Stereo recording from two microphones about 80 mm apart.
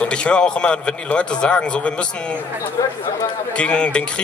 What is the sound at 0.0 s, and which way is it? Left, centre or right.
Speech, centre.